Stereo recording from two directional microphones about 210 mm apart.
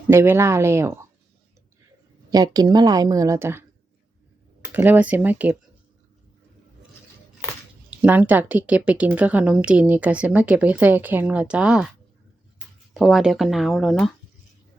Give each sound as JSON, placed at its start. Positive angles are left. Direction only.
{"t": 0.1, "sound": "speech", "side_deg": -10}
{"t": 2.3, "sound": "speech", "side_deg": -20}
{"t": 4.7, "sound": "speech", "side_deg": -10}
{"t": 7.9, "sound": "speech", "side_deg": -10}
{"t": 12.9, "sound": "speech", "side_deg": 0}